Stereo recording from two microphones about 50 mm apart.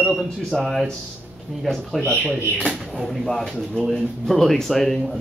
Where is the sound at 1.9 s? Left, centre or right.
Left.